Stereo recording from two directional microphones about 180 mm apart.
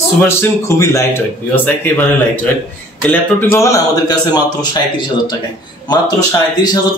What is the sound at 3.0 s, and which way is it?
A man's voice, 10° left (ahead or behind).